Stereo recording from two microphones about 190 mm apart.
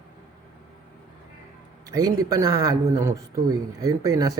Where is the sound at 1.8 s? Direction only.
20° right (ahead or behind).